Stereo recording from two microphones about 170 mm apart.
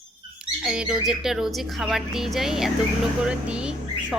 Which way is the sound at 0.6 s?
5° right (ahead or behind).